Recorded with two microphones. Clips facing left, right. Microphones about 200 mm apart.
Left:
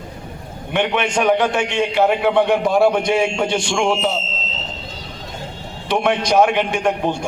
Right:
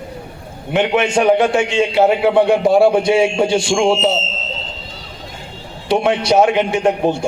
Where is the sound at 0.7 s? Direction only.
25° right (ahead or behind).